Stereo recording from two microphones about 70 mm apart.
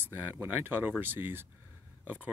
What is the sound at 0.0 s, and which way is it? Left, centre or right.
Speech, right.